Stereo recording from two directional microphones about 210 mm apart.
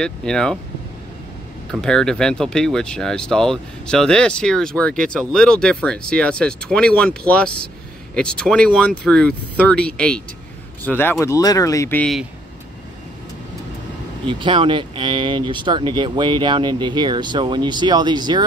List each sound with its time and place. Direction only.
0.0 s speech: 5° left (ahead or behind)
1.7 s speech: centre (ahead or behind)
14.2 s speech: 25° right (ahead or behind)